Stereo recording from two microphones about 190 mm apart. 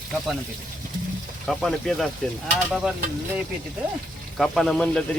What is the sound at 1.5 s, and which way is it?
Speech, centre (ahead or behind).